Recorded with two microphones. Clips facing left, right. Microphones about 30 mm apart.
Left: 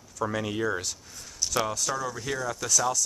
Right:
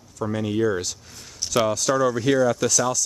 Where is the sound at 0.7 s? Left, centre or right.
Right.